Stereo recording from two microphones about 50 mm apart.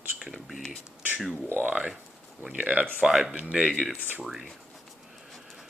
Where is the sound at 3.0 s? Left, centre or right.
Centre.